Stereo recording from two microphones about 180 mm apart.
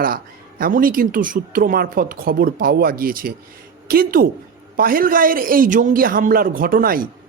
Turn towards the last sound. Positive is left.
turn(degrees=-50)  # may be behind; listen again after turning